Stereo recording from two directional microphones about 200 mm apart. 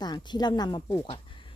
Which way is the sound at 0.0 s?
20° left (ahead or behind).